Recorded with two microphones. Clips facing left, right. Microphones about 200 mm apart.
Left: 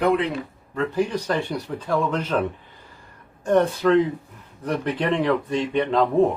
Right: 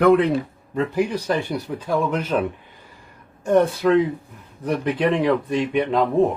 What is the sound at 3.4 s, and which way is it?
Speech, 10° right (ahead or behind).